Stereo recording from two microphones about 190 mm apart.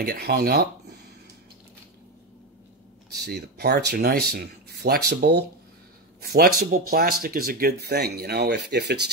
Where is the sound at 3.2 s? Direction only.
60° right (ahead or behind).